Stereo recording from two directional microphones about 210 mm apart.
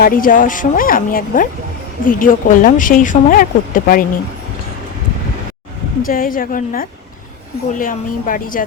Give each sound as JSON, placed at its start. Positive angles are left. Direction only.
{"t": 0.0, "sound": "speech", "side_deg": 40}
{"t": 6.0, "sound": "a woman's voice", "side_deg": 40}